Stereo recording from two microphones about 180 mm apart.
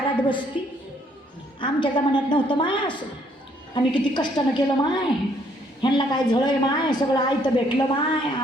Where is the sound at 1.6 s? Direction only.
25° left (ahead or behind).